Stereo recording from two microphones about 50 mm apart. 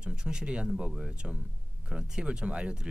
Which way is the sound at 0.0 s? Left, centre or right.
Centre.